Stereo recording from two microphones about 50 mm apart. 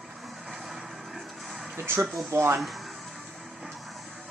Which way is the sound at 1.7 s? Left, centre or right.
Right.